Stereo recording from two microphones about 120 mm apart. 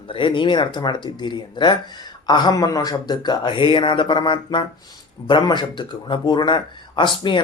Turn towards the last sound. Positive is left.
turn(degrees=40)  # may be behind; listen again after turning